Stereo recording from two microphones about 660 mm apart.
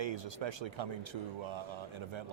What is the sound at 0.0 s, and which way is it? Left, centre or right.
Speech, right.